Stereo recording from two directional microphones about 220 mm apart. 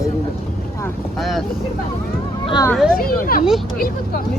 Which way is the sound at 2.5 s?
15° left (ahead or behind).